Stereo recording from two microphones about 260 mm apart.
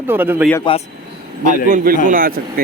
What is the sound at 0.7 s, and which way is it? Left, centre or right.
Speech, centre.